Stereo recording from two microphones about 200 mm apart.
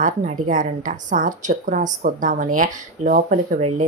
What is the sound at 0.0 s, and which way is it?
Speech, 40° right (ahead or behind).